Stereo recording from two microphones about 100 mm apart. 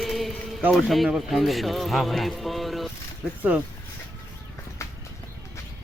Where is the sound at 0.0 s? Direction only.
Centre (ahead or behind).